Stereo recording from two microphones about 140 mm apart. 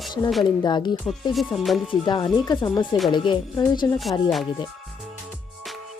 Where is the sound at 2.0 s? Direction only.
30° left (ahead or behind).